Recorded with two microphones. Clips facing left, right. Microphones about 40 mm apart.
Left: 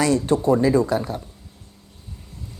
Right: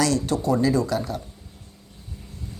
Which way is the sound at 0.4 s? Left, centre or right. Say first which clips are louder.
Left 3 dB; left.